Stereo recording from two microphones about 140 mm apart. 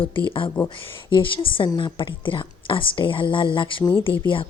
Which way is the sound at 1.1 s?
35° left (ahead or behind).